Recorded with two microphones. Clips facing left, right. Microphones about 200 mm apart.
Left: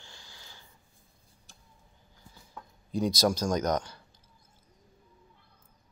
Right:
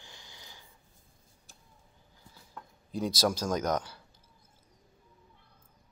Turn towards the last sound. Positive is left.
turn(degrees=-5)  # may be behind; listen again after turning